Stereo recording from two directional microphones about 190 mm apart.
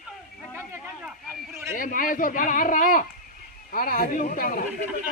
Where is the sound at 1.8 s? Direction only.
45° left (ahead or behind).